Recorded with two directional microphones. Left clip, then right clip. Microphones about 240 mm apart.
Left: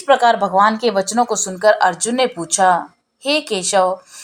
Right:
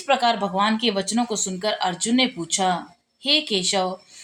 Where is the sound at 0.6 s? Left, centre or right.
Centre.